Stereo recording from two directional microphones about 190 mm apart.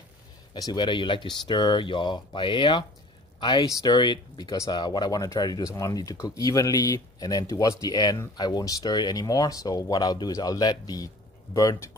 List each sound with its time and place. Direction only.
0.6 s speech: 25° left (ahead or behind)